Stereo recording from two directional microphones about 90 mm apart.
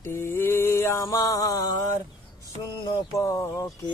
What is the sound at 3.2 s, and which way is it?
Speech, 35° left (ahead or behind).